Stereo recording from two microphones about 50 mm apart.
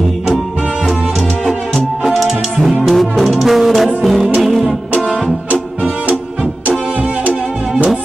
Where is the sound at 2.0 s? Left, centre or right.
Centre.